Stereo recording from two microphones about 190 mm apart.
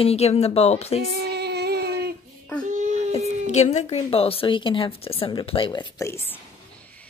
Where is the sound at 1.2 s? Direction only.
60° right (ahead or behind).